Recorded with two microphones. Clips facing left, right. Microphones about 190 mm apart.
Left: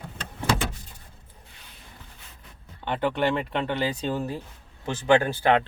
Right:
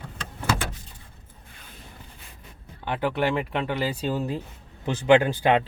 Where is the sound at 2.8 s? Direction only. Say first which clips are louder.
Even; 5° right (ahead or behind).